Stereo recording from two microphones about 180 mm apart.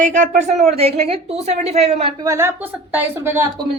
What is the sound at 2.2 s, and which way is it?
A woman's voice, 15° right (ahead or behind).